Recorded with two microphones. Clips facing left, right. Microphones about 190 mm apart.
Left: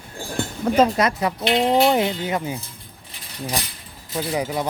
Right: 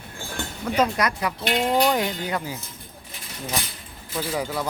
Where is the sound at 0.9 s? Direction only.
25° left (ahead or behind).